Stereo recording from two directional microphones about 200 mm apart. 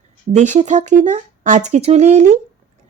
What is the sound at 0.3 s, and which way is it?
Speech, 35° right (ahead or behind).